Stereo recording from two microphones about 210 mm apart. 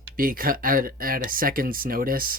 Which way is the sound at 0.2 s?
40° right (ahead or behind).